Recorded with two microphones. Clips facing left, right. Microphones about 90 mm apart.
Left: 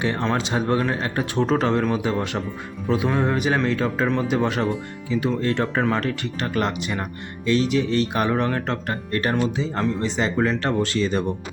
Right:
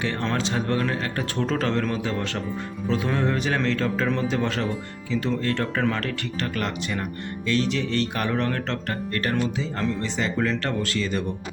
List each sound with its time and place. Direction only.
0.0 s speech: 20° left (ahead or behind)